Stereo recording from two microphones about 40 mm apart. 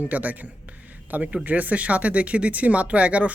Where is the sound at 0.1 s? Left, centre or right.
Right.